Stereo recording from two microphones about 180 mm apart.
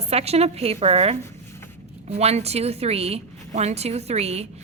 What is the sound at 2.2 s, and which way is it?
A woman's voice, 35° right (ahead or behind).